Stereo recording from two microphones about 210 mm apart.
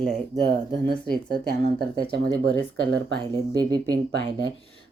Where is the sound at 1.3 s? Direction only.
50° right (ahead or behind).